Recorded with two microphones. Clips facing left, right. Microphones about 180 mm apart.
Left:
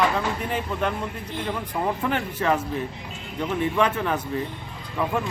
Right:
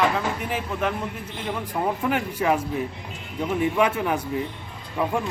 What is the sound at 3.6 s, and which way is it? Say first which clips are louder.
A man's voice: right 1 dB; 10° right (ahead or behind).